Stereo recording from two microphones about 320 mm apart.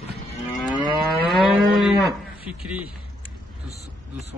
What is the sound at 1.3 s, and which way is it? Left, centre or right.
Moo, centre.